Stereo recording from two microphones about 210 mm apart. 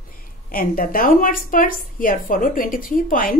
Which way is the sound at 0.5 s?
45° left (ahead or behind).